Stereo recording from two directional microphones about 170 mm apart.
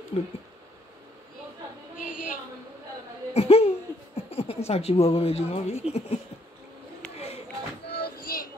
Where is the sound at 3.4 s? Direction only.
35° left (ahead or behind).